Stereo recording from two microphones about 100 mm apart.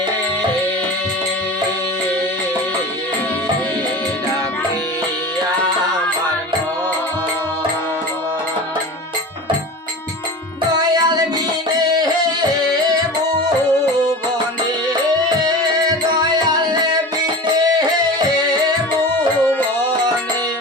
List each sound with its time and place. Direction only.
10.8 s music: 40° right (ahead or behind)
19.1 s music: 20° left (ahead or behind)